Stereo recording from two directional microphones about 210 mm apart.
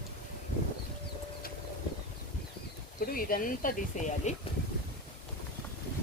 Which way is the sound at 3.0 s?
45° left (ahead or behind).